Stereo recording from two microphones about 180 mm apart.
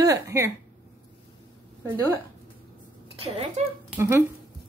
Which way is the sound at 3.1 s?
35° right (ahead or behind).